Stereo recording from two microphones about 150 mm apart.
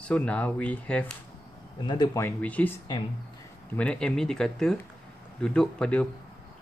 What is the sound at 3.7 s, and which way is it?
Speech, 10° left (ahead or behind).